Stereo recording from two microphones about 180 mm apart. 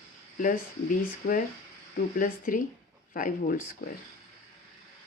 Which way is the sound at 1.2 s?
65° left (ahead or behind).